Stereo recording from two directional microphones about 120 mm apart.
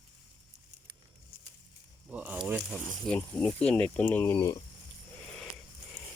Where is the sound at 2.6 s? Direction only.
5° left (ahead or behind).